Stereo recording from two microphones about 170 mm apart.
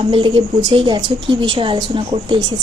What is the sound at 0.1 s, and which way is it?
A woman's voice, 30° right (ahead or behind).